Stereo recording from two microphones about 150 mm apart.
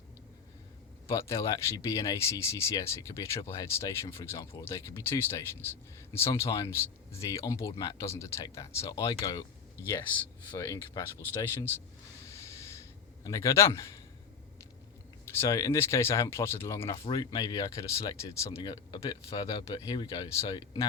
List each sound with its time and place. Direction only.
1.0 s speech: 20° left (ahead or behind)
10.5 s speech: 20° left (ahead or behind)
13.2 s speech: 20° left (ahead or behind)
15.4 s speech: 20° left (ahead or behind)